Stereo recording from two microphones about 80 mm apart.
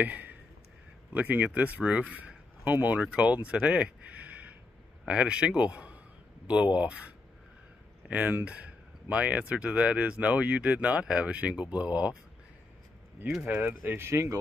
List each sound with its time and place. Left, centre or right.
0.0 s speech: right
13.5 s speech: right